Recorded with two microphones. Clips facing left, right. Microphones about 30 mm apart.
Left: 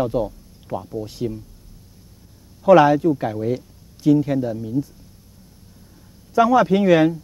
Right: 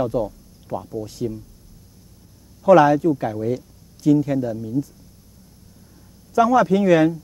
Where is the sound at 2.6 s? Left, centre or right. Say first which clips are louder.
Even; left.